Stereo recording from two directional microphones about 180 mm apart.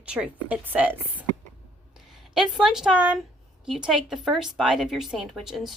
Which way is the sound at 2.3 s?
5° right (ahead or behind).